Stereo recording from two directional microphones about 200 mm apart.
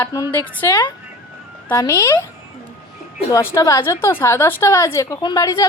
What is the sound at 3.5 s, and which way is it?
A woman's voice, 15° left (ahead or behind).